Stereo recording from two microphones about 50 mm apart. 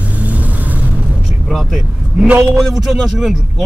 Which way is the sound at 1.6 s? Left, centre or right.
Centre.